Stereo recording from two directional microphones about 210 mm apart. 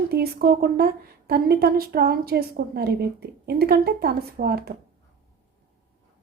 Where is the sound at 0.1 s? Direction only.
45° right (ahead or behind).